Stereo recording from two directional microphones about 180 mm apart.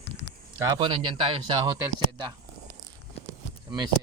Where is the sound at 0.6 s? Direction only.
20° right (ahead or behind).